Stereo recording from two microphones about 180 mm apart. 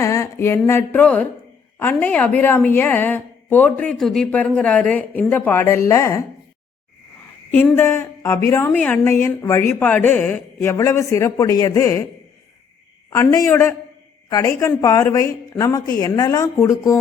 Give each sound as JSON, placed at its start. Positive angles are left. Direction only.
{"t": 0.0, "sound": "a woman's voice", "side_deg": 15}
{"t": 7.5, "sound": "a woman's voice", "side_deg": 10}
{"t": 13.1, "sound": "a woman's voice", "side_deg": 15}